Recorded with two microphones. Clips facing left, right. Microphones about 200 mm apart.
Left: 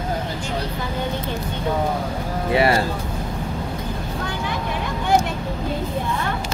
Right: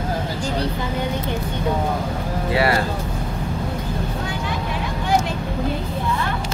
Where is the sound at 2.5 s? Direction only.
25° left (ahead or behind).